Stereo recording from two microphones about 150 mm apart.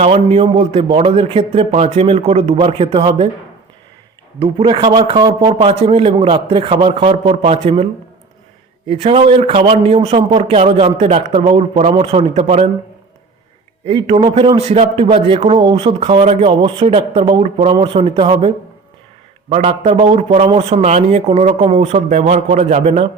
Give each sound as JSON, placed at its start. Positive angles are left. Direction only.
{"t": 0.0, "sound": "a man's voice", "side_deg": -45}
{"t": 4.4, "sound": "a man's voice", "side_deg": -35}
{"t": 8.9, "sound": "a man's voice", "side_deg": -40}
{"t": 13.8, "sound": "a man's voice", "side_deg": -35}
{"t": 19.9, "sound": "a man's voice", "side_deg": -30}
{"t": 20.1, "sound": "a man's voice", "side_deg": -45}